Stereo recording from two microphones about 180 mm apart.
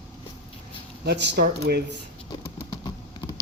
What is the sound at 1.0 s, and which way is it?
Speech, 65° right (ahead or behind).